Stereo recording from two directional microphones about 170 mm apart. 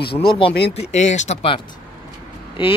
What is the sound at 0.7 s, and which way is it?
Speech, 45° left (ahead or behind).